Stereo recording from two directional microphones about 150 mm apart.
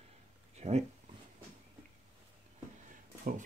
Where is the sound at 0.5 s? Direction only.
45° right (ahead or behind).